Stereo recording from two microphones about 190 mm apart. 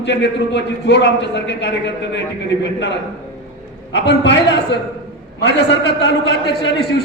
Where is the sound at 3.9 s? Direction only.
70° left (ahead or behind).